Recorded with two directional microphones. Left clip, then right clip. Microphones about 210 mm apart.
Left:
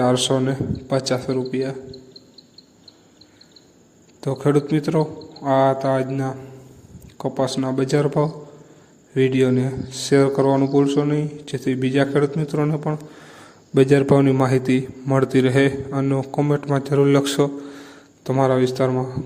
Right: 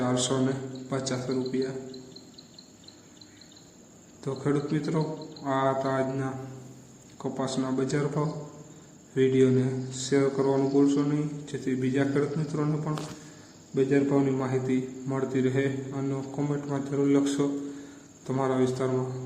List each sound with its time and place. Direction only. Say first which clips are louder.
0.0 s speech: left 9 dB; 40° left (ahead or behind)
4.2 s speech: left 9 dB; 40° left (ahead or behind)
13.7 s a man's voice: left 9 dB; 50° left (ahead or behind)